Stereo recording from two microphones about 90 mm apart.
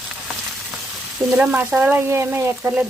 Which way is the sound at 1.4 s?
20° right (ahead or behind).